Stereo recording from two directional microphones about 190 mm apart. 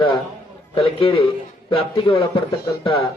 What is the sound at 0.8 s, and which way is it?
A man's voice, 30° left (ahead or behind).